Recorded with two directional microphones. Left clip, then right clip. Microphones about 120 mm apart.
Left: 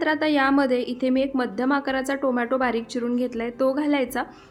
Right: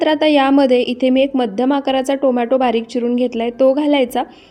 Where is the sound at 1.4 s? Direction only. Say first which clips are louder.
Right 7 dB; 25° right (ahead or behind).